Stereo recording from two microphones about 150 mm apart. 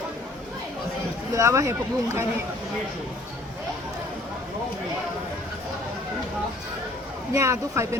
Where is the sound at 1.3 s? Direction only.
20° right (ahead or behind).